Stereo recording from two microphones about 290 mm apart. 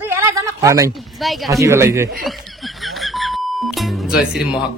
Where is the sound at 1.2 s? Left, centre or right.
Centre.